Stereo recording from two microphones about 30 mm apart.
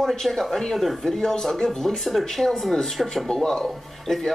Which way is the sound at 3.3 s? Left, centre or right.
Centre.